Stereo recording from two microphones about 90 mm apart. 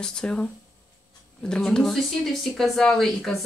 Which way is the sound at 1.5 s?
10° left (ahead or behind).